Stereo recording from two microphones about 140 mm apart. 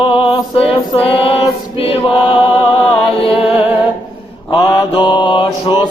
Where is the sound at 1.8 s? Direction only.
45° left (ahead or behind).